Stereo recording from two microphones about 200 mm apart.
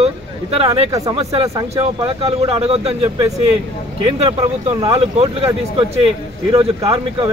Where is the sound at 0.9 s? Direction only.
15° right (ahead or behind).